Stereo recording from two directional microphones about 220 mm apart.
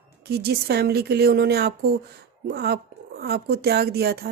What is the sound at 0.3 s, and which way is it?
A woman's voice, 45° right (ahead or behind).